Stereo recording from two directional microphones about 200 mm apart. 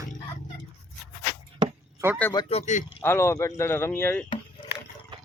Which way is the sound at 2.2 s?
15° left (ahead or behind).